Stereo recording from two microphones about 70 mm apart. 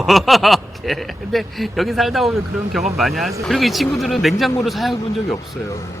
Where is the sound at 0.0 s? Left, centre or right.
Centre.